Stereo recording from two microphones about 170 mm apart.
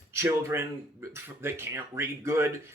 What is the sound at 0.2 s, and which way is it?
Speech, 15° right (ahead or behind).